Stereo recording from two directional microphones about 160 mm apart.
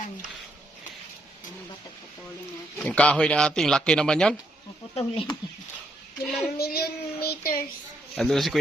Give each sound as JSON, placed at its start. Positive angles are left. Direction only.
{"t": 2.7, "sound": "speech", "side_deg": 10}
{"t": 4.9, "sound": "speech", "side_deg": 35}
{"t": 6.2, "sound": "speech", "side_deg": -5}
{"t": 6.6, "sound": "a child's voice", "side_deg": 75}
{"t": 8.1, "sound": "speech", "side_deg": 0}